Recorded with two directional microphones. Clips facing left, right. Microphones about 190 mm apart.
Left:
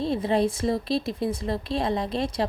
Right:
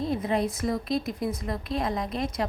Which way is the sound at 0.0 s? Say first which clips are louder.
Left 3 dB; 30° left (ahead or behind).